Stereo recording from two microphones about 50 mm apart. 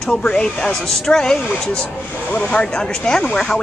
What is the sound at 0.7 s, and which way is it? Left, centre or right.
Speech, centre.